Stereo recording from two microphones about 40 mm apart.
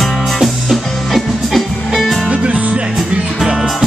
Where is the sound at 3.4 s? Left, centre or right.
Centre.